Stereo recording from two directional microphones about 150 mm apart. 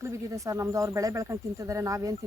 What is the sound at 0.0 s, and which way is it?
Speech, 20° right (ahead or behind).